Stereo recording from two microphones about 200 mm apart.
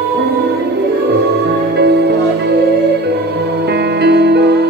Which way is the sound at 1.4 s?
60° right (ahead or behind).